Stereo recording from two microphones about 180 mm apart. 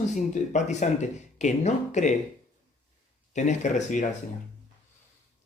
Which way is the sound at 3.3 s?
40° left (ahead or behind).